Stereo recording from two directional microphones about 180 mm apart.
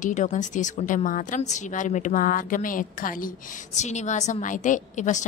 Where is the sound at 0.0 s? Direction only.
45° left (ahead or behind).